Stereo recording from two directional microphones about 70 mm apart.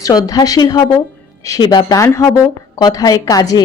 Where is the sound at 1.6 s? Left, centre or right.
Left.